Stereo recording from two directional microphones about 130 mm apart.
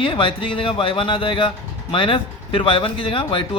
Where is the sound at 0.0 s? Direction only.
40° left (ahead or behind).